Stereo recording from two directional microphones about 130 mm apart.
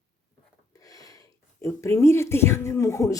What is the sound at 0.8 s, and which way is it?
Speech, 30° left (ahead or behind).